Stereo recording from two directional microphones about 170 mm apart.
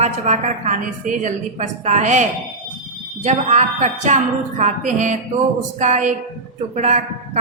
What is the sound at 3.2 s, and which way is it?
A woman's voice, 40° right (ahead or behind).